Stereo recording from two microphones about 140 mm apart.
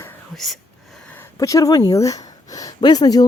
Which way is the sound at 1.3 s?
25° left (ahead or behind).